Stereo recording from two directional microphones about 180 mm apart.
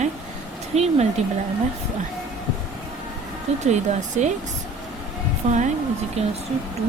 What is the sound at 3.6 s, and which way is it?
Speech, 40° right (ahead or behind).